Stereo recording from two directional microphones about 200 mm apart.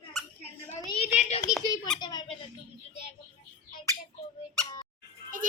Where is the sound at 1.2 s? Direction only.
35° left (ahead or behind).